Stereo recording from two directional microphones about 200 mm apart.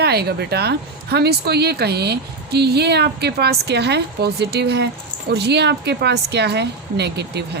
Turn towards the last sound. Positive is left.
turn(degrees=-55)  # may be behind; listen again after turning